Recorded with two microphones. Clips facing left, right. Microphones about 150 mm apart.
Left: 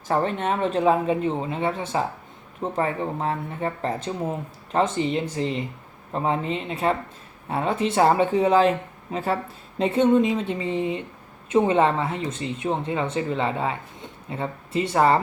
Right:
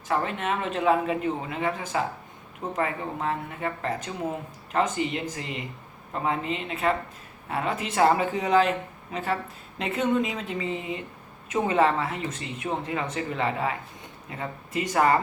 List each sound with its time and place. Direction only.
0.1 s speech: 35° left (ahead or behind)